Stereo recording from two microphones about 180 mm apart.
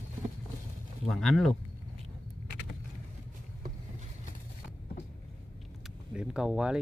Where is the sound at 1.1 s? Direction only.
Centre (ahead or behind).